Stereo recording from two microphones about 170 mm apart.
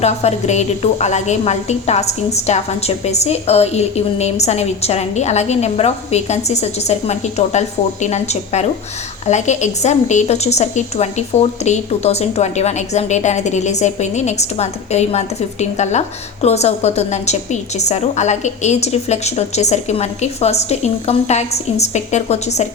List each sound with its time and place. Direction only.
0.0 s a woman's voice: 40° left (ahead or behind)